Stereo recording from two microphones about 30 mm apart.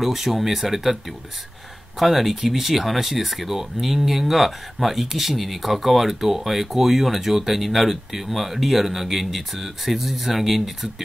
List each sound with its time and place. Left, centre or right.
0.0 s speech: centre
2.0 s speech: centre